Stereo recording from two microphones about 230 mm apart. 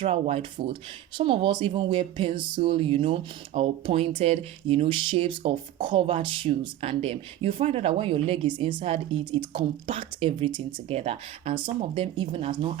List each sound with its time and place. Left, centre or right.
0.0 s speech: right